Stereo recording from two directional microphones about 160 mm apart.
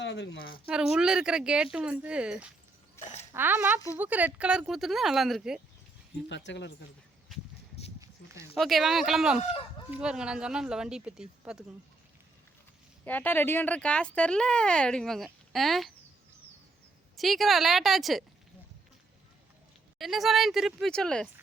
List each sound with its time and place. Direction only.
0.0 s speech: 90° left
0.7 s speech: 5° right (ahead or behind)
3.0 s speech: 15° left (ahead or behind)
3.3 s speech: 10° right (ahead or behind)
6.2 s speech: 90° left
8.5 s speech: centre (ahead or behind)
13.1 s speech: 10° left (ahead or behind)
17.2 s speech: centre (ahead or behind)
20.0 s speech: centre (ahead or behind)